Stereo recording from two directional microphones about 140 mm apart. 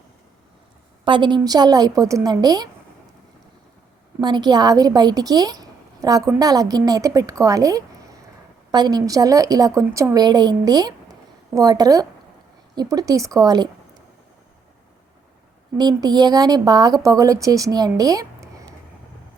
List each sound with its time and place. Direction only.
1.0 s a woman's voice: 35° right (ahead or behind)
4.2 s a woman's voice: 30° right (ahead or behind)
15.8 s a woman's voice: 30° right (ahead or behind)